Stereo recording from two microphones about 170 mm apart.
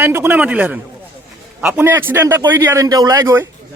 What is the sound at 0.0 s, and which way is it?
A man's voice, 15° right (ahead or behind).